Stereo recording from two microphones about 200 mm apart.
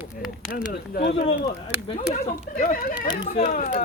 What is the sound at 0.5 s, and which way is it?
Speech, 50° left (ahead or behind).